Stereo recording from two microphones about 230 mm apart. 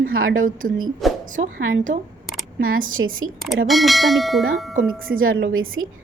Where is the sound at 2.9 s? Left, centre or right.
Right.